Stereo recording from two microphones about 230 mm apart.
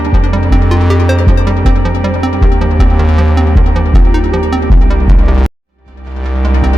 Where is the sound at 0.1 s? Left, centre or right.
Centre.